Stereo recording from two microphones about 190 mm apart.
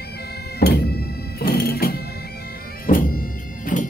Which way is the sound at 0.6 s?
55° left (ahead or behind).